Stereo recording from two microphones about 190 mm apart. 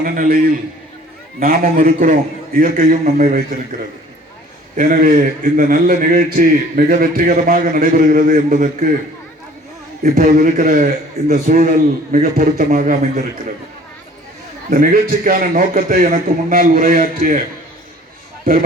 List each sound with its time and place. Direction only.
0.0 s a man's voice: 45° right (ahead or behind)
1.4 s a man's voice: 50° right (ahead or behind)
4.8 s a man's voice: 45° right (ahead or behind)
10.0 s a man's voice: 50° right (ahead or behind)
14.7 s a man's voice: 45° right (ahead or behind)
18.5 s a man's voice: 50° right (ahead or behind)